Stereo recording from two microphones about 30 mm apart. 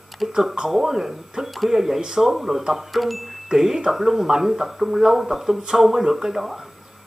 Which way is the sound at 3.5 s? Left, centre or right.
Centre.